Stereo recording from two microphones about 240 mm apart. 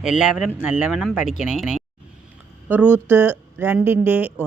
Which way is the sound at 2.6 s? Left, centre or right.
Centre.